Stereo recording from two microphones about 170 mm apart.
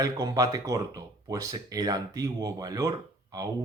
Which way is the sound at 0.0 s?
20° right (ahead or behind).